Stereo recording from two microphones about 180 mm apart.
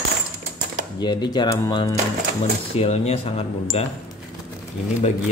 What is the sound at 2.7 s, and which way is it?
Speech, 35° left (ahead or behind).